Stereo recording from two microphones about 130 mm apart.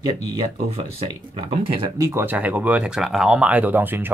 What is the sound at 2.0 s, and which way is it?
Speech, 20° right (ahead or behind).